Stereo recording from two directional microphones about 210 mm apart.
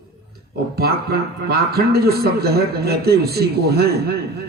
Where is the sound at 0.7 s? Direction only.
50° right (ahead or behind).